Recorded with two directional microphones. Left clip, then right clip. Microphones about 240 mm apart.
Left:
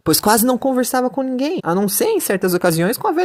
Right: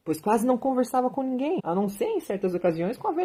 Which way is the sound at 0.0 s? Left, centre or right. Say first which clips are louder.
Left 9 dB; left.